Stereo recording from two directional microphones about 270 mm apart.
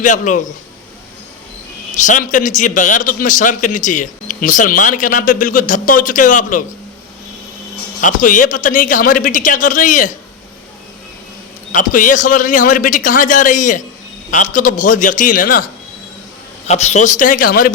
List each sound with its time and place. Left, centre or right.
0.0 s a man's voice: left
1.9 s a man's voice: left
8.0 s a man's voice: left
11.7 s a man's voice: left